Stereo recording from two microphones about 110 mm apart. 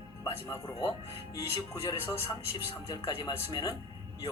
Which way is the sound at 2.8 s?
35° left (ahead or behind).